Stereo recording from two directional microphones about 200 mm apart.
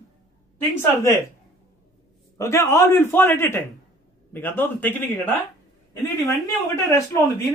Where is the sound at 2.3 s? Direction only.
15° left (ahead or behind).